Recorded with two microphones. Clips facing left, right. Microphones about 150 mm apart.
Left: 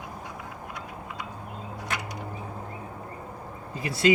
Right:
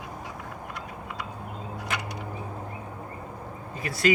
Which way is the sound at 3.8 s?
25° left (ahead or behind).